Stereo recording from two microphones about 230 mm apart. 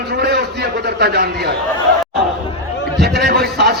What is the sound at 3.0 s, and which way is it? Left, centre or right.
Speech, right.